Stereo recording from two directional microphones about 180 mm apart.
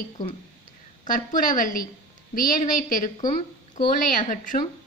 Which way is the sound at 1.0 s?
50° left (ahead or behind).